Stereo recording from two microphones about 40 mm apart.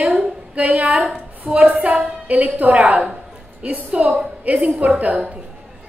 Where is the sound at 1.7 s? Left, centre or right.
Right.